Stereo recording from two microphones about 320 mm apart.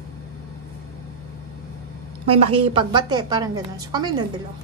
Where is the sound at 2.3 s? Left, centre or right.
Centre.